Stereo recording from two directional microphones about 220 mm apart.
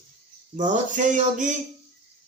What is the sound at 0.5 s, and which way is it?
Speech, 35° right (ahead or behind).